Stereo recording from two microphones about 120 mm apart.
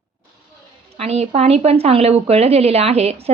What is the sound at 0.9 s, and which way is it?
Speech, 60° right (ahead or behind).